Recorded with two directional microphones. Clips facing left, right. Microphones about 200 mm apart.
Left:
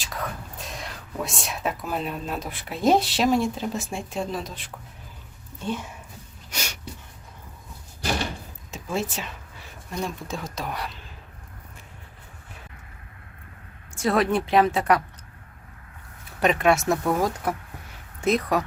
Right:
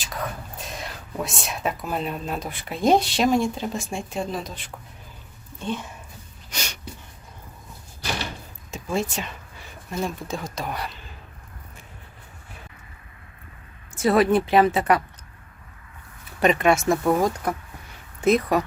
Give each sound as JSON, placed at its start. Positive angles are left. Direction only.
{"t": 0.6, "sound": "speech", "side_deg": 0}
{"t": 6.5, "sound": "a sound", "side_deg": 5}
{"t": 8.7, "sound": "speech", "side_deg": 5}
{"t": 13.9, "sound": "speech", "side_deg": -5}
{"t": 16.4, "sound": "speech", "side_deg": 0}